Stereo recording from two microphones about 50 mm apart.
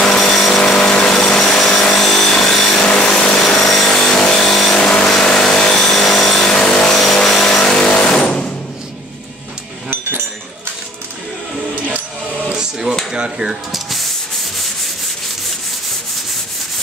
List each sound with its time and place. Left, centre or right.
0.0 s a sound: centre
1.5 s tools: centre
3.0 s power tool: centre
4.7 s vehicle: centre
6.0 s power tool: centre
6.5 s vehicle: centre
8.1 s a sound: centre
12.4 s a sound: centre
13.7 s rub: centre